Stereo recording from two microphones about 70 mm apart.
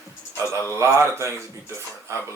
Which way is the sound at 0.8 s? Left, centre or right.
Right.